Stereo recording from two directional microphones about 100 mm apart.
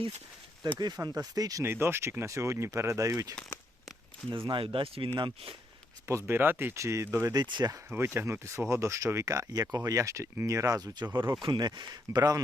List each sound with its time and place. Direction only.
0.8 s speech: 40° right (ahead or behind)
1.6 s speech: 25° right (ahead or behind)
4.3 s speech: 55° right (ahead or behind)
6.1 s speech: 25° right (ahead or behind)
7.4 s speech: 50° right (ahead or behind)
7.9 s speech: 20° right (ahead or behind); by 11.1 s 40° right (ahead or behind)
11.1 s speech: 25° right (ahead or behind)
11.4 s speech: 50° right (ahead or behind)